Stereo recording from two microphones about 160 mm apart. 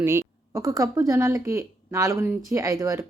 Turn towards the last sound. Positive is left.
turn(degrees=-20)  # may be behind; listen again after turning